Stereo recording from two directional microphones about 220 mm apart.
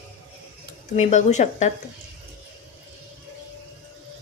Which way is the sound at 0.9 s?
30° left (ahead or behind).